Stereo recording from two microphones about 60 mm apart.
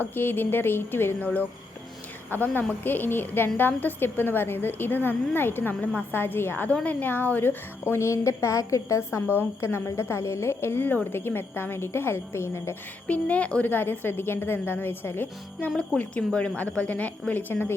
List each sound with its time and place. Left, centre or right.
0.0 s a woman's voice: left
2.3 s a woman's voice: left
9.1 s a woman's voice: left
13.1 s a woman's voice: left
16.0 s a woman's voice: centre
17.5 s a woman's voice: left